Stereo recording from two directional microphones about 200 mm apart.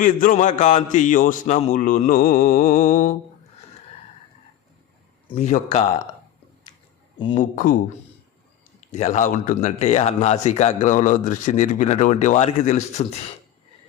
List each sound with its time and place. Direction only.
0.0 s a man's voice: 40° left (ahead or behind)
5.3 s a man's voice: 35° left (ahead or behind)
7.3 s speech: 40° left (ahead or behind)
9.0 s a man's voice: 35° left (ahead or behind)